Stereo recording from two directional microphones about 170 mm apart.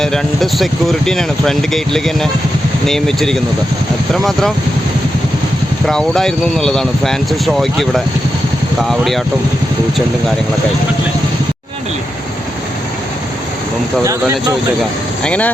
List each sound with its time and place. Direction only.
0.0 s speech: 5° left (ahead or behind)
5.8 s speech: 5° left (ahead or behind)
14.0 s speech: 20° right (ahead or behind)
15.2 s speech: 10° left (ahead or behind)